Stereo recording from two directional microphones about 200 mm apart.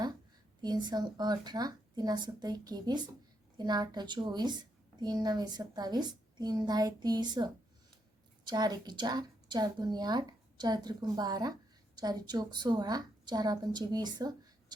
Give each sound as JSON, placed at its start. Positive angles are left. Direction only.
{"t": 0.6, "sound": "speech", "side_deg": -20}